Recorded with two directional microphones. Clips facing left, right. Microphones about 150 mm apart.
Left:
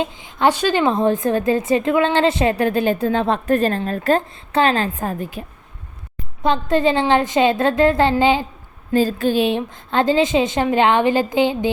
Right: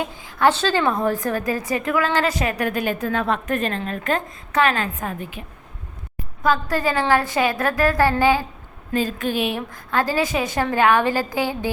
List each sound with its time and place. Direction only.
0.0 s a woman's voice: 20° left (ahead or behind); by 5.4 s 35° left (ahead or behind)
6.4 s a woman's voice: 25° left (ahead or behind)
8.9 s a woman's voice: 35° left (ahead or behind)